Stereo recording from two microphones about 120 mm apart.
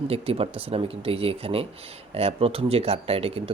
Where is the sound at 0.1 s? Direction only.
50° right (ahead or behind).